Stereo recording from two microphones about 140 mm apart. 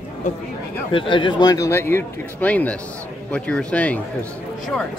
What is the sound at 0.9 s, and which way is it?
Speech, 35° left (ahead or behind).